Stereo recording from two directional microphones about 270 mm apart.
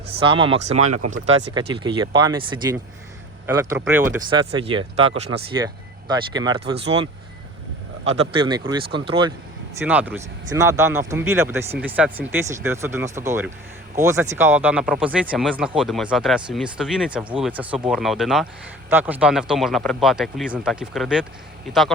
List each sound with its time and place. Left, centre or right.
0.1 s speech: centre
8.2 s speech: centre
9.8 s speech: centre